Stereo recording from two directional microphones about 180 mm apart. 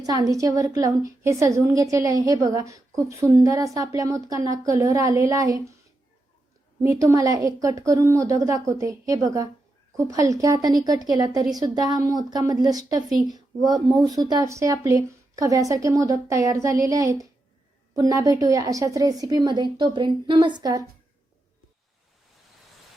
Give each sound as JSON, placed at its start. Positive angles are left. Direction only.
{"t": 0.0, "sound": "a woman's voice", "side_deg": -20}
{"t": 6.8, "sound": "a woman's voice", "side_deg": -15}